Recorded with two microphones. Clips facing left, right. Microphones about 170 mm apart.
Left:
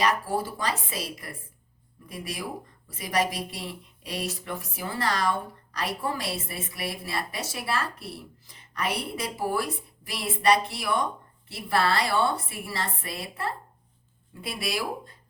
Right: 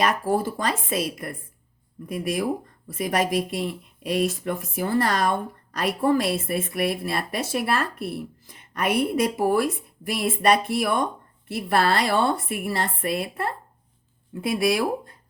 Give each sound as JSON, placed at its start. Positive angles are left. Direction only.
{"t": 0.0, "sound": "a woman's voice", "side_deg": -50}